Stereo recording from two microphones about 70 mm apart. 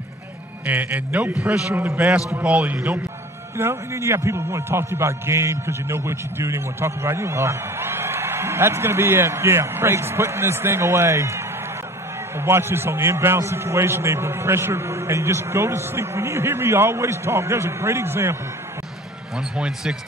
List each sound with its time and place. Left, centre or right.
0.7 s speech: right
1.4 s speech: centre
3.5 s a man's voice: right
19.5 s speech: centre